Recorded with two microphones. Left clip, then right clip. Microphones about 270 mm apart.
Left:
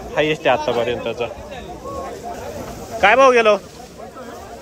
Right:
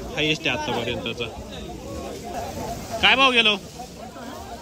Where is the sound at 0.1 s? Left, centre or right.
Centre.